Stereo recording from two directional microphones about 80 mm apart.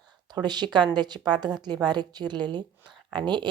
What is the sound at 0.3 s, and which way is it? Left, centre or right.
A woman's voice, right.